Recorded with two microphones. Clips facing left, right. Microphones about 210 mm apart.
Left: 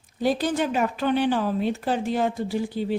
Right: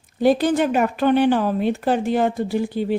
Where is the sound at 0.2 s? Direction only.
60° right (ahead or behind).